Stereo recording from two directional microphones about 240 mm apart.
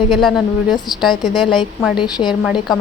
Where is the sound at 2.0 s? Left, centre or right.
Centre.